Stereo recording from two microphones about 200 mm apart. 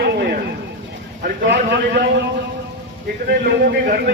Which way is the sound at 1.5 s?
60° right (ahead or behind).